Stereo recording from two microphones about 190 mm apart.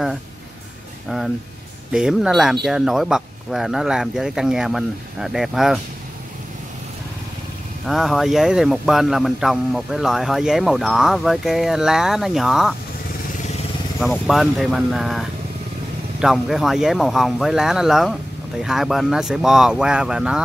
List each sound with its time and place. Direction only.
1.0 s speech: centre (ahead or behind)
7.8 s speech: centre (ahead or behind)
13.9 s speech: centre (ahead or behind)